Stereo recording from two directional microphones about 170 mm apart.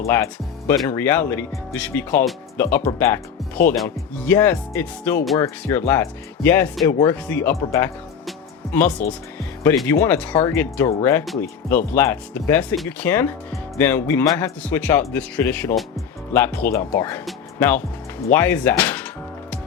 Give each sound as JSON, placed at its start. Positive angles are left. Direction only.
{"t": 0.0, "sound": "speech", "side_deg": 15}
{"t": 12.7, "sound": "speech", "side_deg": 0}
{"t": 13.1, "sound": "speech", "side_deg": 10}